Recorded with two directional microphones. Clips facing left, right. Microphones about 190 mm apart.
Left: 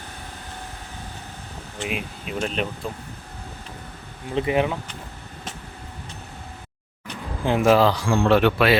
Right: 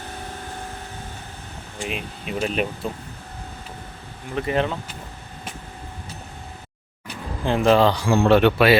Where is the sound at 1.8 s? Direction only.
5° left (ahead or behind).